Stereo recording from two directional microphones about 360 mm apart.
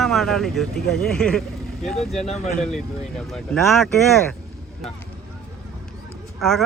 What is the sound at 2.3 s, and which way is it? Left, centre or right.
Speech, centre.